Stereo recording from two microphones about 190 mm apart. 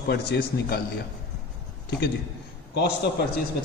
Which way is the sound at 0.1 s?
55° left (ahead or behind).